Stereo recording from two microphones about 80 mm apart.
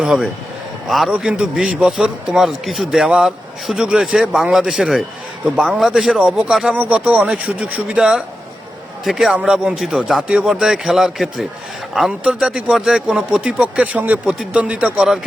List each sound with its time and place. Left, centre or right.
0.0 s a man's voice: centre